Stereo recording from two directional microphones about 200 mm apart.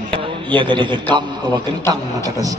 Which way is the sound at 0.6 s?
25° right (ahead or behind).